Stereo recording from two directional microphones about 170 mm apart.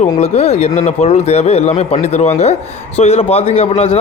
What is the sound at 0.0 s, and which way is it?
A man's voice, 40° left (ahead or behind).